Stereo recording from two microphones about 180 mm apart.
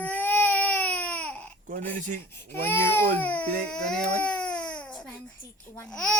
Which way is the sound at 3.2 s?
10° left (ahead or behind).